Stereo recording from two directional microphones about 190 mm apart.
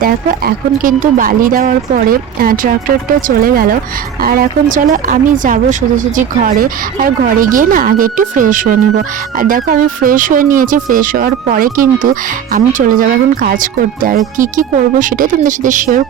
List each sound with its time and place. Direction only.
0.0 s speech: 45° right (ahead or behind)